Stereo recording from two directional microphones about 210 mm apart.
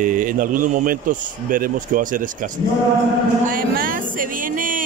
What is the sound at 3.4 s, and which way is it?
Music, 40° right (ahead or behind).